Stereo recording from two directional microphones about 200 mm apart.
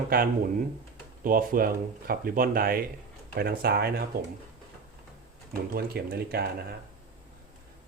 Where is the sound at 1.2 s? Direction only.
45° right (ahead or behind).